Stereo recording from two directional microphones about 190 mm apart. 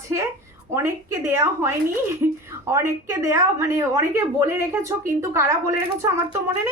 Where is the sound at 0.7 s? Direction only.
15° right (ahead or behind).